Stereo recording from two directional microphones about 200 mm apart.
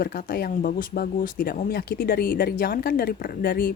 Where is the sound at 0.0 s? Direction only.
45° left (ahead or behind).